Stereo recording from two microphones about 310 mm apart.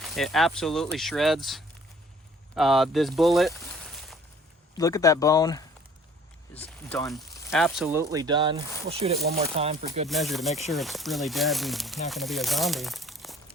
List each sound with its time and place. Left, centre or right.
0.0 s speech: centre
10.1 s speech: centre